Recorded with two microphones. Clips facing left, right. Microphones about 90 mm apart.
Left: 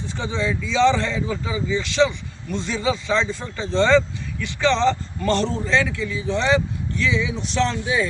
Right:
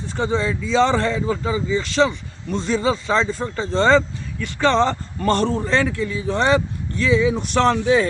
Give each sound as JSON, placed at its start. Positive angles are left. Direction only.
{"t": 0.2, "sound": "a man's voice", "side_deg": -40}
{"t": 7.4, "sound": "speech", "side_deg": -55}